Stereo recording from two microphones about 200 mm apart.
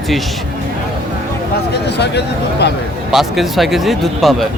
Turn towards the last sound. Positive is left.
turn(degrees=0)  # may be behind; listen again after turning